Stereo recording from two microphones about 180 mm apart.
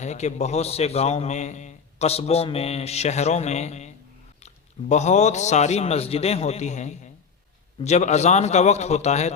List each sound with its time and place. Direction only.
0.0 s a man's voice: 40° left (ahead or behind)